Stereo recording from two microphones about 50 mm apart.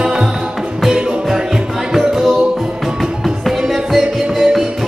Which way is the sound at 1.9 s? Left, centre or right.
Centre.